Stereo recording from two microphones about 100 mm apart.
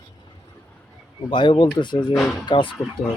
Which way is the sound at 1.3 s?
50° left (ahead or behind).